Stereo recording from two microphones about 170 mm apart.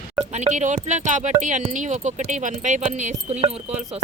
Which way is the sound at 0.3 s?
45° right (ahead or behind).